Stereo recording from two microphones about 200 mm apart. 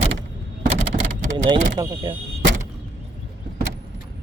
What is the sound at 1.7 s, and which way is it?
Speech, 20° right (ahead or behind).